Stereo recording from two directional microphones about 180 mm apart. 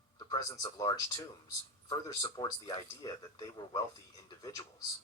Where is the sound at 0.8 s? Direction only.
20° left (ahead or behind).